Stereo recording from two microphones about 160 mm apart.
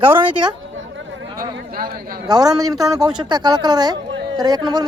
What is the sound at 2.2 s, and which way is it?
Speech, 25° right (ahead or behind).